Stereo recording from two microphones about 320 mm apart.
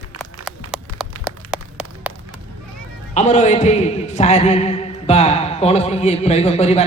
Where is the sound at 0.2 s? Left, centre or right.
Centre.